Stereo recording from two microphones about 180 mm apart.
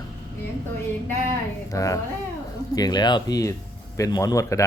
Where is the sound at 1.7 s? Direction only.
20° left (ahead or behind).